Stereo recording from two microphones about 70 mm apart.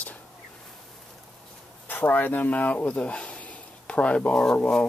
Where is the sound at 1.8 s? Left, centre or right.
Left; by 4.8 s centre.